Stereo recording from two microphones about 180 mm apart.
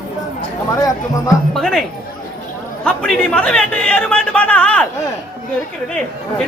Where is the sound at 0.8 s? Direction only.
20° left (ahead or behind).